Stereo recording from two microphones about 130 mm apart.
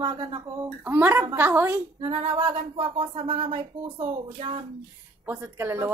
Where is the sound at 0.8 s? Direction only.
15° right (ahead or behind).